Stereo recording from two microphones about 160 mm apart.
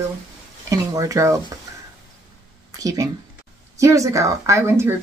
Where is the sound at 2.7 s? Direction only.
20° right (ahead or behind).